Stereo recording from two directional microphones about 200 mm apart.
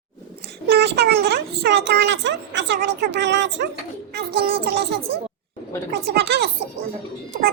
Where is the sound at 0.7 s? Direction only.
55° right (ahead or behind).